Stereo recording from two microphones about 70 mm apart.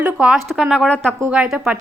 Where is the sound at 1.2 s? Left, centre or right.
Centre.